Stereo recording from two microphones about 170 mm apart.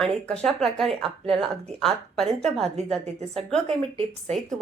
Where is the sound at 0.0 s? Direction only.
5° left (ahead or behind).